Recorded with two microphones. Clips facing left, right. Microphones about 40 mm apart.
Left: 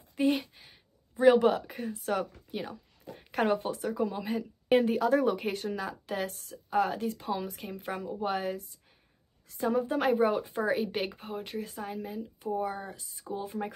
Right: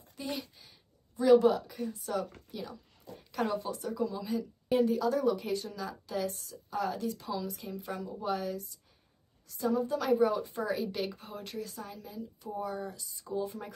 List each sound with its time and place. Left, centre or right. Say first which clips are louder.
0.1 s a woman's voice: left 11 dB; left